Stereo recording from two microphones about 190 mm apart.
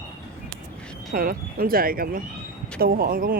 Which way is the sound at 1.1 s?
50° right (ahead or behind).